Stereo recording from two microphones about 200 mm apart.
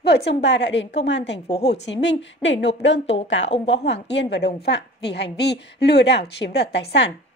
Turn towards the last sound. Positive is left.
turn(degrees=60)  # may be behind; listen again after turning